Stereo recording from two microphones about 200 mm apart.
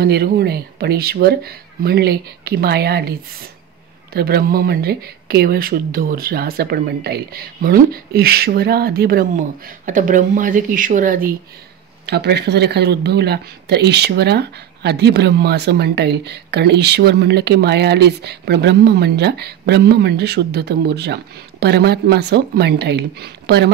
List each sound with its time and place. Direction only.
0.0 s speech: 55° right (ahead or behind)
12.1 s speech: 55° right (ahead or behind)